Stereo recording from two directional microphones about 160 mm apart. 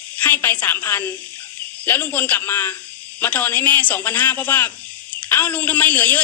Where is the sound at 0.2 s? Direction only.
10° left (ahead or behind).